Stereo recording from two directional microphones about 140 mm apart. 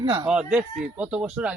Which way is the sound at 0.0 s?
35° right (ahead or behind).